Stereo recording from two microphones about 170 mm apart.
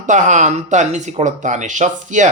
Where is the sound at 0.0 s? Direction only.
45° right (ahead or behind).